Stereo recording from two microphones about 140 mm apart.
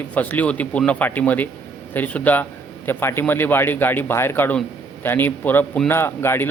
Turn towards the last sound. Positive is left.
turn(degrees=15)  # may be behind; listen again after turning